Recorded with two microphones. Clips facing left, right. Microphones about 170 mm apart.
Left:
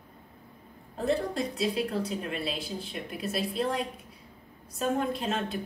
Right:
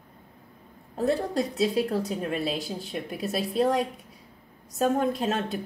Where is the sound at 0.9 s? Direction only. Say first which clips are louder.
Right 3 dB; 40° right (ahead or behind).